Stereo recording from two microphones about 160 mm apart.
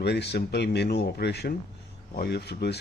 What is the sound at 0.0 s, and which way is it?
Speech, 90° left.